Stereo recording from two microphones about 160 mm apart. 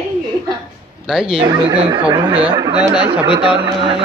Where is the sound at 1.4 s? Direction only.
25° right (ahead or behind).